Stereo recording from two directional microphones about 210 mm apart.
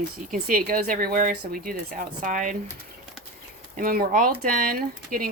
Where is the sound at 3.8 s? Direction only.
45° right (ahead or behind).